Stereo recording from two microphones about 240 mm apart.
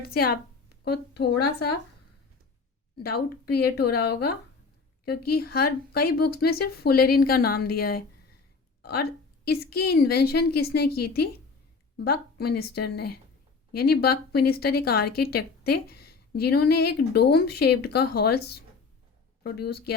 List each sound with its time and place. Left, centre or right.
0.1 s speech: left
3.0 s speech: left
12.4 s speech: left